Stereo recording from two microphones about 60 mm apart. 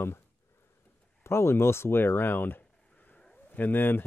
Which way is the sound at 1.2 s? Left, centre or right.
Left.